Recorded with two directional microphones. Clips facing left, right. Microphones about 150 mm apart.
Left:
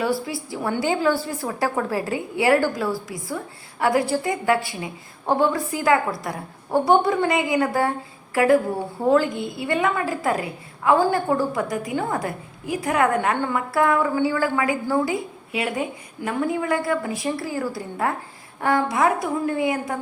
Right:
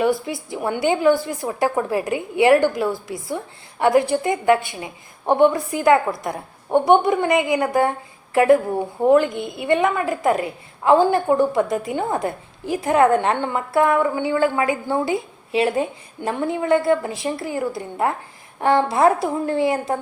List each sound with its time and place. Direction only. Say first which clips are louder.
0.0 s a woman's voice: right 4 dB; 20° right (ahead or behind)